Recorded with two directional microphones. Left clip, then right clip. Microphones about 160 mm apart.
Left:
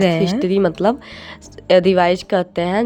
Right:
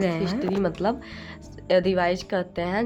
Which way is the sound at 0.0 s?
50° left (ahead or behind).